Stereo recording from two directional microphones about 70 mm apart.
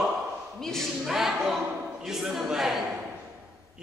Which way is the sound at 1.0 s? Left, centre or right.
Centre.